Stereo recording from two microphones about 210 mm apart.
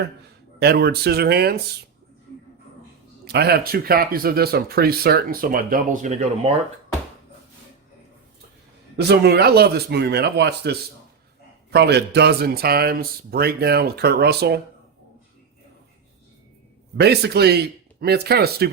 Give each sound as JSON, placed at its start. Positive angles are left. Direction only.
{"t": 0.6, "sound": "speech", "side_deg": -50}
{"t": 3.2, "sound": "speech", "side_deg": -50}
{"t": 9.0, "sound": "speech", "side_deg": -50}
{"t": 17.0, "sound": "speech", "side_deg": -50}